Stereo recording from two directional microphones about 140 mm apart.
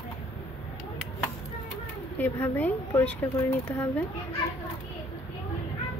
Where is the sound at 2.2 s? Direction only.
15° left (ahead or behind).